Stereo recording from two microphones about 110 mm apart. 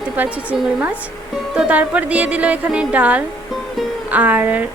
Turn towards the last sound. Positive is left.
turn(degrees=-15)  # may be behind; listen again after turning